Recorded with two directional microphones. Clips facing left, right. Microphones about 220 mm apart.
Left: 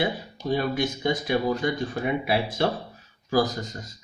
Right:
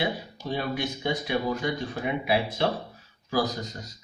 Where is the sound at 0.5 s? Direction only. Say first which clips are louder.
Left 4 dB; 50° left (ahead or behind).